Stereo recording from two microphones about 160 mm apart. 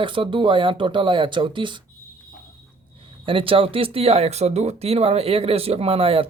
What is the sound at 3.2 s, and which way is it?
Speech, 35° right (ahead or behind).